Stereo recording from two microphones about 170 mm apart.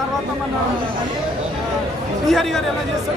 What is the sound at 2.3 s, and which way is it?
Speech, centre (ahead or behind).